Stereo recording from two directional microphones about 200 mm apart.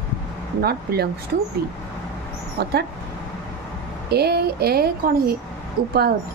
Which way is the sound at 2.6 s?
55° right (ahead or behind).